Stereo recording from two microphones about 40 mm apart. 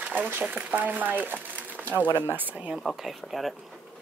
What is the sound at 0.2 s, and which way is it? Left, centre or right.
Speech, right.